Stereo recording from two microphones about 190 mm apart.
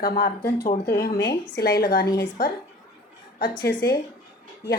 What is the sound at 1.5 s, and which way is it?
Speech, 55° left (ahead or behind).